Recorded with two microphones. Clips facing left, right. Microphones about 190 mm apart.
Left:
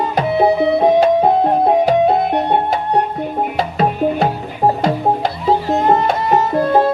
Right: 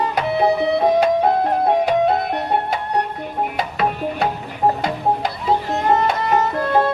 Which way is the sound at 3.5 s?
35° left (ahead or behind).